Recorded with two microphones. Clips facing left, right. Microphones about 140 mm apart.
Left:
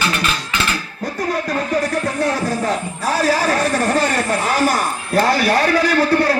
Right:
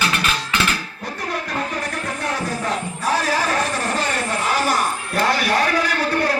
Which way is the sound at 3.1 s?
35° left (ahead or behind).